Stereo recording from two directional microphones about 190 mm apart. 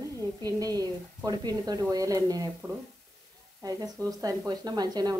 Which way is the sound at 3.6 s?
20° right (ahead or behind).